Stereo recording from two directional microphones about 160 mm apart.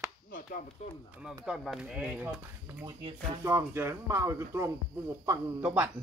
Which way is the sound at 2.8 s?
30° right (ahead or behind).